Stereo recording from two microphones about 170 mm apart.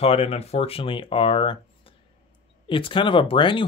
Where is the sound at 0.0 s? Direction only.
35° left (ahead or behind).